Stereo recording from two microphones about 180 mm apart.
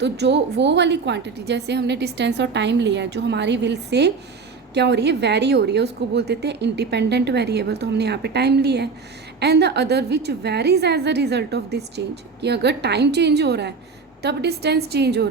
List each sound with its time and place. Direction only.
0.0 s a woman's voice: 70° right (ahead or behind)